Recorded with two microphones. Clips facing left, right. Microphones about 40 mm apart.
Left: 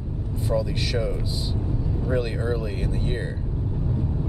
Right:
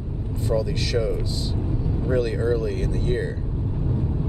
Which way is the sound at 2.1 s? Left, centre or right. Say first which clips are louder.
Right 4 dB; centre.